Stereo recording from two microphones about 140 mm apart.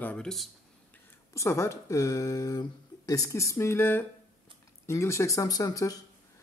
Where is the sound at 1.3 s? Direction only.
20° left (ahead or behind).